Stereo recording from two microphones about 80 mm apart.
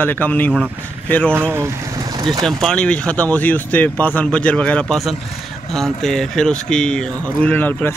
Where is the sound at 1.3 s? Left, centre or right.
Right.